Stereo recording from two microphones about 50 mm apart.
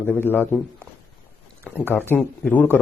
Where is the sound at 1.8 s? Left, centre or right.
Left.